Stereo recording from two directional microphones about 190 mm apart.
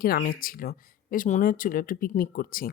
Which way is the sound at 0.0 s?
50° left (ahead or behind).